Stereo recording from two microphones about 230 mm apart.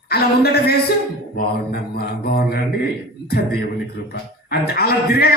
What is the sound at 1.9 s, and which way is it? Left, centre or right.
Speech, left.